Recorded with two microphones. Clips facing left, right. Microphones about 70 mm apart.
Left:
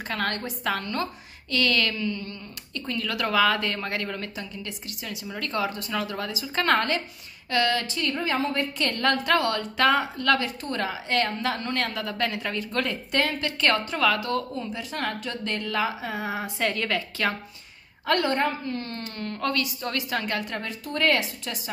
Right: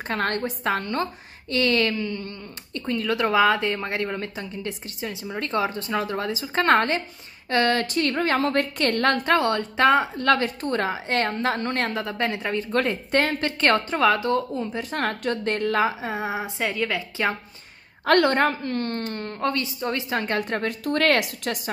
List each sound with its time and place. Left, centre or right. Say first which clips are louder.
0.1 s a woman's voice: right 4 dB; right
0.7 s a woman's voice: right 2 dB; right
9.2 s a woman's voice: right 3 dB; right
13.2 s a woman's voice: even; right
14.6 s a woman's voice: right 4 dB; right
16.0 s speech: right 2 dB; right
16.6 s a woman's voice: even; centre
18.0 s a woman's voice: right 5 dB; right
19.3 s speech: right 1 dB; right
20.3 s a woman's voice: right 5 dB; right
20.6 s speech: right 3 dB; right